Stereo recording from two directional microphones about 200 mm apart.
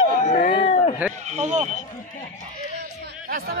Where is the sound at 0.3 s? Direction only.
40° left (ahead or behind).